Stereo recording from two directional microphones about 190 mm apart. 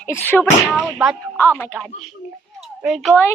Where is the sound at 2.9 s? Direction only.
Centre (ahead or behind).